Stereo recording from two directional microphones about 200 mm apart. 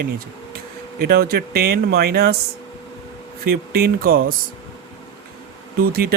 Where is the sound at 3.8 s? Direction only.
45° right (ahead or behind).